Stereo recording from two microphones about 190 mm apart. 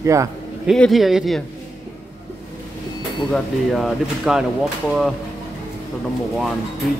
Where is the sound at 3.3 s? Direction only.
Centre (ahead or behind).